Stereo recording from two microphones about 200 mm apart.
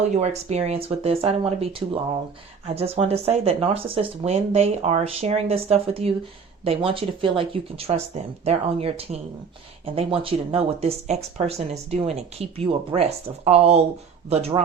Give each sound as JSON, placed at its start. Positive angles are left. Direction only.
{"t": 0.1, "sound": "speech", "side_deg": -35}